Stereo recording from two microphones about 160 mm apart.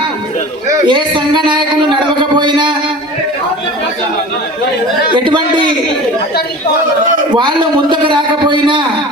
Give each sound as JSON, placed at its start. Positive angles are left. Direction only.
{"t": 0.7, "sound": "speech", "side_deg": -30}
{"t": 5.1, "sound": "speech", "side_deg": -30}
{"t": 7.3, "sound": "speech", "side_deg": -30}